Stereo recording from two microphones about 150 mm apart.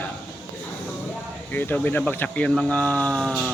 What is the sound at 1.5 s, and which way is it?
Speech, 10° left (ahead or behind).